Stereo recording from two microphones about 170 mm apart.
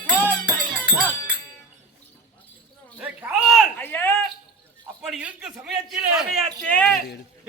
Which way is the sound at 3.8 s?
10° left (ahead or behind).